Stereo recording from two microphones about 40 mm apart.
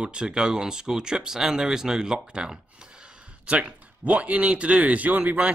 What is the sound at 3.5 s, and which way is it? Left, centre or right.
Speech, right.